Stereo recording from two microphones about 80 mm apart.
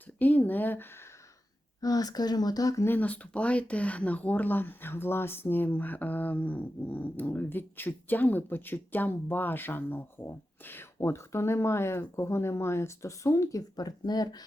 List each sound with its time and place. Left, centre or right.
0.2 s speech: left
1.8 s speech: left
2.8 s speech: left
13.6 s speech: left